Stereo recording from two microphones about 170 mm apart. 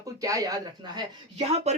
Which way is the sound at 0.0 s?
20° right (ahead or behind).